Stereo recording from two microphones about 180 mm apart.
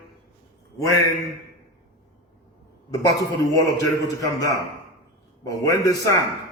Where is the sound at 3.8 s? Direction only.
20° left (ahead or behind).